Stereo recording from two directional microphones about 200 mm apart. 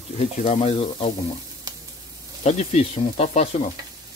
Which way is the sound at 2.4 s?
30° left (ahead or behind).